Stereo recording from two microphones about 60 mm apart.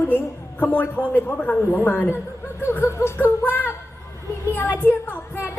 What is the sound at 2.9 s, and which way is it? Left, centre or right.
Speech, left.